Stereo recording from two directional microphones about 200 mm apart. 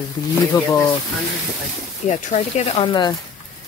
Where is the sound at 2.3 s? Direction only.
35° left (ahead or behind).